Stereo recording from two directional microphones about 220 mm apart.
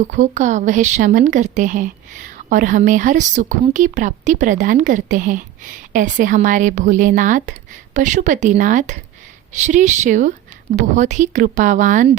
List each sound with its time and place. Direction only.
0.0 s a woman's voice: 35° right (ahead or behind)